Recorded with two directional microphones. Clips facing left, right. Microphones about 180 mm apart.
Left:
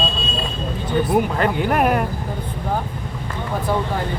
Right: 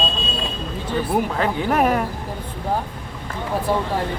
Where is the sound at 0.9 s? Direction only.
Centre (ahead or behind).